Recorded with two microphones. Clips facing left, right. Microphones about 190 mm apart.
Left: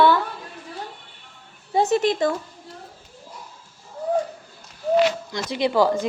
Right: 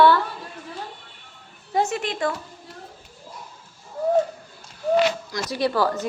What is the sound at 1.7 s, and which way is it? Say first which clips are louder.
Speech: left 5 dB; 35° left (ahead or behind).